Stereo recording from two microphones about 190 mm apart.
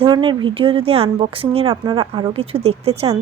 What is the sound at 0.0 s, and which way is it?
A woman's voice, 25° right (ahead or behind).